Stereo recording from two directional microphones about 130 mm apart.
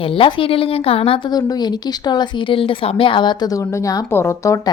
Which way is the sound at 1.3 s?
30° left (ahead or behind).